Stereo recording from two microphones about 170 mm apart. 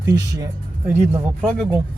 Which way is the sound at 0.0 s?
20° right (ahead or behind).